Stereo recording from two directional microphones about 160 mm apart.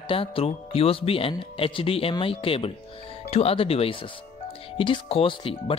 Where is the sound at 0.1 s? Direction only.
35° left (ahead or behind).